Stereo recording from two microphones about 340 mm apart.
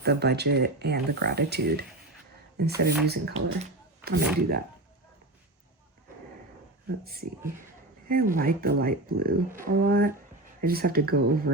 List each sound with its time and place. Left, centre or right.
0.0 s speech: right
7.0 s speech: right